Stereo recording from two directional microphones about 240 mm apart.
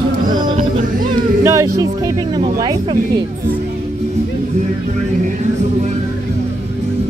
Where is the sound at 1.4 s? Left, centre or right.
Centre.